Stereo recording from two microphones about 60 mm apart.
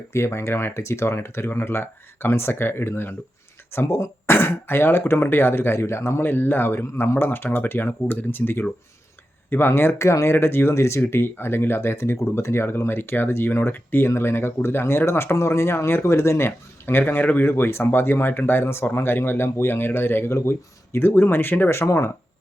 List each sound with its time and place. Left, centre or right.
0.1 s speech: left
10.3 s speech: left